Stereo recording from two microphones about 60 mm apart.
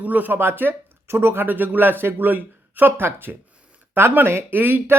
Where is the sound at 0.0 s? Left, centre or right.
Right.